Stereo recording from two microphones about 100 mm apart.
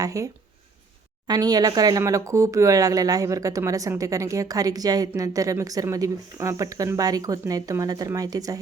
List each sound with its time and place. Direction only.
0.0 s speech: 35° right (ahead or behind)
1.3 s speech: 40° right (ahead or behind)